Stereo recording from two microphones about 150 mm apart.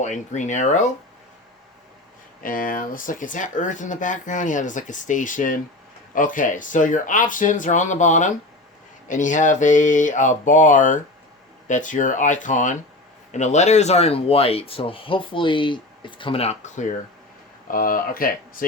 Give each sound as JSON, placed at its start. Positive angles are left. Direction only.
{"t": 0.0, "sound": "speech", "side_deg": 55}
{"t": 2.4, "sound": "speech", "side_deg": 65}
{"t": 17.7, "sound": "speech", "side_deg": 70}